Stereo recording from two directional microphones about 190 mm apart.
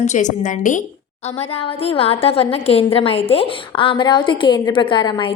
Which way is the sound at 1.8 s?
30° left (ahead or behind).